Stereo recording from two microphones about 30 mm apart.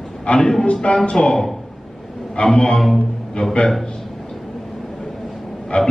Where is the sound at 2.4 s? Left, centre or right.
Left.